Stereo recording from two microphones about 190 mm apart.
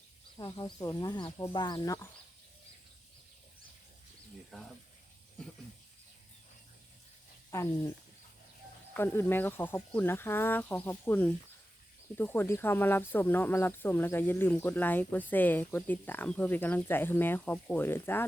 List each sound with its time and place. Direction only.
0.3 s speech: 20° left (ahead or behind)
4.5 s speech: centre (ahead or behind)
7.5 s speech: 15° left (ahead or behind)